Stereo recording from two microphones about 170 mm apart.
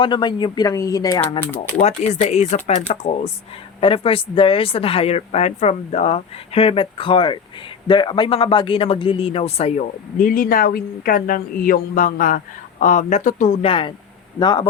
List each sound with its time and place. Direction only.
0.0 s speech: 25° left (ahead or behind)
1.8 s speech: 40° left (ahead or behind); by 14.7 s 25° left (ahead or behind)